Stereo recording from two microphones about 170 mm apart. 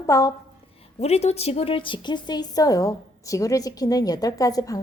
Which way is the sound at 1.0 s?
40° left (ahead or behind).